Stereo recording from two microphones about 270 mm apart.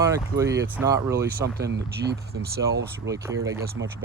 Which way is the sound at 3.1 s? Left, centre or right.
Centre.